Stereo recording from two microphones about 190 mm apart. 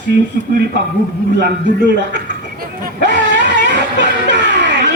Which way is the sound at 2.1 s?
55° right (ahead or behind).